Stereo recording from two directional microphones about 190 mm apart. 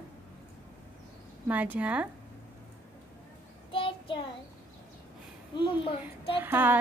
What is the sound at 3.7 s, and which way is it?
Child singing, 25° left (ahead or behind).